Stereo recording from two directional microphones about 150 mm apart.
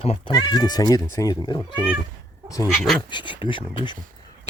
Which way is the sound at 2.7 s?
Centre (ahead or behind).